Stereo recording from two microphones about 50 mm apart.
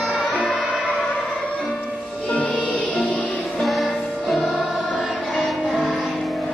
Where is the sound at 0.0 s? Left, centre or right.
Centre.